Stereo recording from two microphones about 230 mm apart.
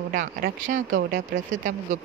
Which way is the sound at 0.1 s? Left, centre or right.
Right.